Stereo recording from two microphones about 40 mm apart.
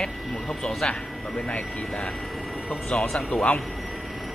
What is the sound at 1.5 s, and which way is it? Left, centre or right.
Speech, left.